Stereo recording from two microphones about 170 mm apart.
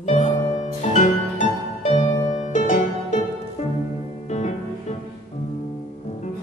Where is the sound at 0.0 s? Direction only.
40° left (ahead or behind).